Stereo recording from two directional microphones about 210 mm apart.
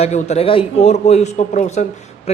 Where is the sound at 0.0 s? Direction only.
30° left (ahead or behind).